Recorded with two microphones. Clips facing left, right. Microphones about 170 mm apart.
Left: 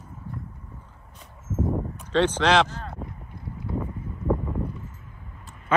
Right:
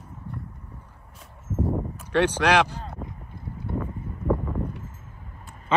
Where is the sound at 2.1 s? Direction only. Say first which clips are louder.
Even; 10° right (ahead or behind).